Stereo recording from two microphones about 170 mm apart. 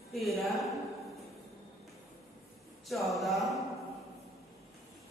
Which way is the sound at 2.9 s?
Centre (ahead or behind).